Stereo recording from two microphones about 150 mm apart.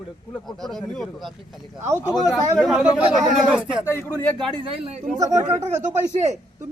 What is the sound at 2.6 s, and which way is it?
A man's voice, 5° right (ahead or behind).